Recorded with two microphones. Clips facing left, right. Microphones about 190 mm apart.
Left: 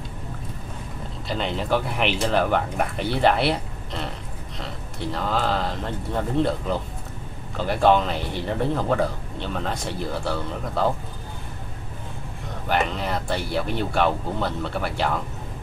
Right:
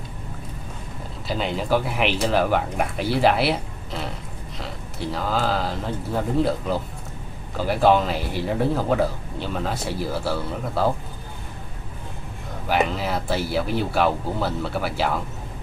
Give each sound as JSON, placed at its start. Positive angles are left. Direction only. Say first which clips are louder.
{"t": 1.2, "sound": "speech", "louder": "right 1 dB", "side_deg": -5}
{"t": 12.6, "sound": "speech", "louder": "right 2 dB", "side_deg": -5}